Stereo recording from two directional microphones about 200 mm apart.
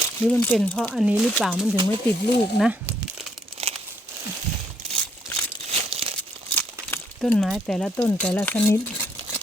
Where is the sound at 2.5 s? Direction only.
Centre (ahead or behind).